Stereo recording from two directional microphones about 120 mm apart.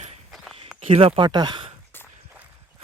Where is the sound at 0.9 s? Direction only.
50° right (ahead or behind).